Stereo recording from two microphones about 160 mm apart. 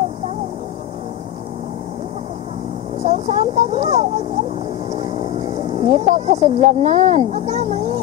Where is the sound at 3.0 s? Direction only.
40° right (ahead or behind).